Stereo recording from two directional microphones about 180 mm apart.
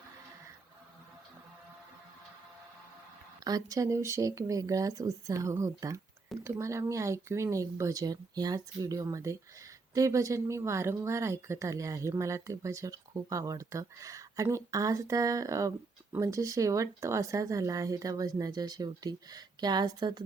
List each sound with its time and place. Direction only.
3.4 s speech: 20° right (ahead or behind)